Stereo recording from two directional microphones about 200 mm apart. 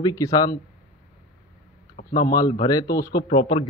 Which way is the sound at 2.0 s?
30° left (ahead or behind).